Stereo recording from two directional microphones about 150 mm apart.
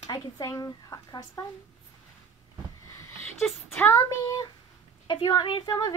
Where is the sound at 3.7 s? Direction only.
20° left (ahead or behind).